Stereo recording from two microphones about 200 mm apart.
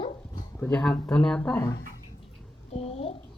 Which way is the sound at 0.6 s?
5° left (ahead or behind).